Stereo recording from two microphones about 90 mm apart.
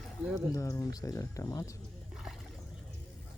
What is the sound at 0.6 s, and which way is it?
Speech, 35° left (ahead or behind).